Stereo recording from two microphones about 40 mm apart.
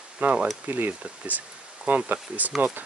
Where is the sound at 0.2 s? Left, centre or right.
Right.